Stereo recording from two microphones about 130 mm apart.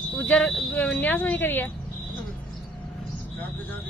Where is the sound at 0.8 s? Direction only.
10° left (ahead or behind).